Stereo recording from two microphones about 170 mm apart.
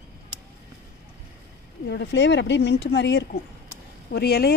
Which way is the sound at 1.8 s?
90° left.